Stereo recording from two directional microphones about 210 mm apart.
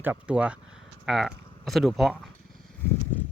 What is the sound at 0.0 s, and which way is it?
Speech, 5° right (ahead or behind).